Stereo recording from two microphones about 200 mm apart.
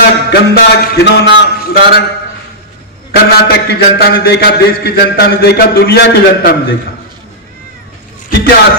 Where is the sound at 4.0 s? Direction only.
50° left (ahead or behind).